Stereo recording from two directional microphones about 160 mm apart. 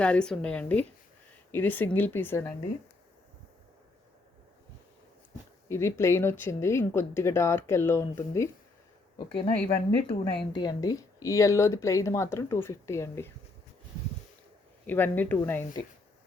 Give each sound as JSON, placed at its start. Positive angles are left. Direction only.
{"t": 0.0, "sound": "speech", "side_deg": 5}
{"t": 5.6, "sound": "speech", "side_deg": 15}
{"t": 9.1, "sound": "speech", "side_deg": 35}
{"t": 14.8, "sound": "speech", "side_deg": 10}